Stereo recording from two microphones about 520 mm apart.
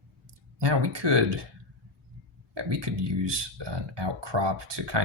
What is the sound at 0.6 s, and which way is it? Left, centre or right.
Speech, right.